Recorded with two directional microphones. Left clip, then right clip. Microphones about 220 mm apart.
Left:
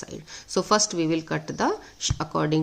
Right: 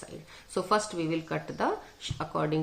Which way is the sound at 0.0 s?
45° left (ahead or behind).